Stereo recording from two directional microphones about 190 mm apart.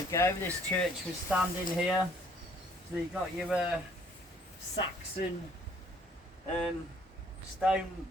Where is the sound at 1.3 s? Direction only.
5° right (ahead or behind).